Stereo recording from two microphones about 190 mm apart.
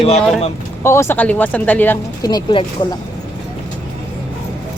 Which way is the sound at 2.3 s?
25° left (ahead or behind).